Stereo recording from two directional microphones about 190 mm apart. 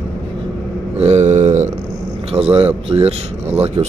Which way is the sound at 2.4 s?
10° right (ahead or behind).